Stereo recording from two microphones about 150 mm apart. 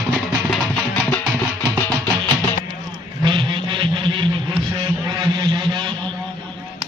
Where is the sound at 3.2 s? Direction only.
30° right (ahead or behind).